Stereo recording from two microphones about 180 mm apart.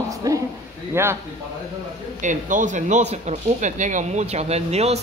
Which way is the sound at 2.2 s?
45° right (ahead or behind).